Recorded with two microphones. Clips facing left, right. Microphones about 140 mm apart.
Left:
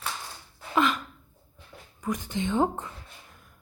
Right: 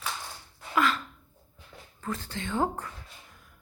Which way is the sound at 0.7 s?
20° left (ahead or behind).